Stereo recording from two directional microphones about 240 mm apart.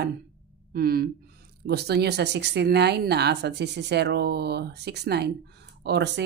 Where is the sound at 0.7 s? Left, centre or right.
Right.